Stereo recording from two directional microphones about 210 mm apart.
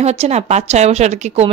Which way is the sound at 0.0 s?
30° right (ahead or behind).